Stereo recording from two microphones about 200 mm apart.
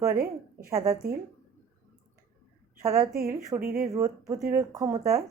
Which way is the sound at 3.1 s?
50° right (ahead or behind).